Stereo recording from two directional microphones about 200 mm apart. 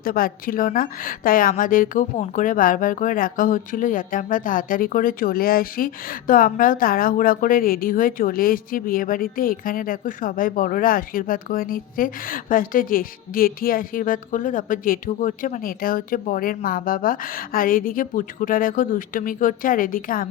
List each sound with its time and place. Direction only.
0.0 s a woman's voice: 45° left (ahead or behind)